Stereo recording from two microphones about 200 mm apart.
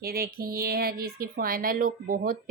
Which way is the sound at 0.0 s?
50° right (ahead or behind).